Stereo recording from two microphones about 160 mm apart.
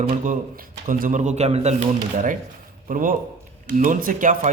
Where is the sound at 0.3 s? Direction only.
60° right (ahead or behind).